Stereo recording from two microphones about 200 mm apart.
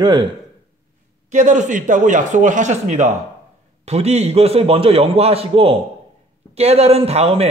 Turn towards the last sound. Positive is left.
turn(degrees=-30)  # may be behind; listen again after turning